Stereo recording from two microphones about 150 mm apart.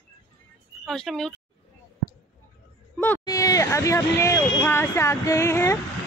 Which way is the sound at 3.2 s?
25° left (ahead or behind).